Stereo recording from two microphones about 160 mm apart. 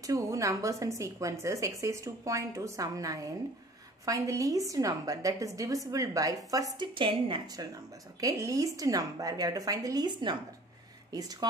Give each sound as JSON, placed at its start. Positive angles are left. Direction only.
{"t": 0.0, "sound": "a woman's voice", "side_deg": -20}